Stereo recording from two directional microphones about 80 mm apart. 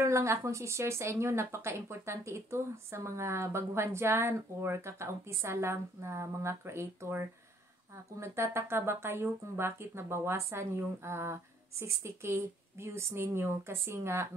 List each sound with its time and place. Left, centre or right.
0.0 s speech: right